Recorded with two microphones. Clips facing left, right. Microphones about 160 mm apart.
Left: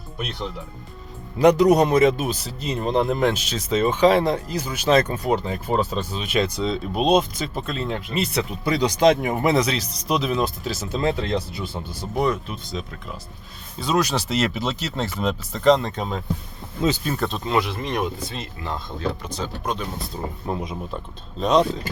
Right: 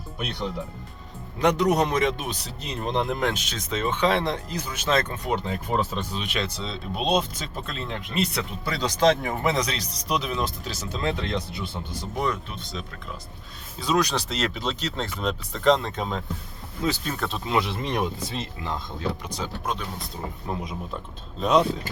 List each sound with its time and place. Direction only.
1.4 s speech: 10° left (ahead or behind)
8.6 s speech: 15° left (ahead or behind); by 17.5 s centre (ahead or behind)
17.5 s speech: 20° right (ahead or behind)
19.6 s speech: centre (ahead or behind)